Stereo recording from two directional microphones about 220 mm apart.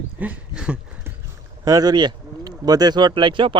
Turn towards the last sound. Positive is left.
turn(degrees=-20)  # may be behind; listen again after turning